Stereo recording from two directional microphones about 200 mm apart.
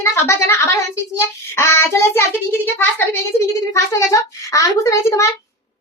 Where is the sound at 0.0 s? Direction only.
15° left (ahead or behind).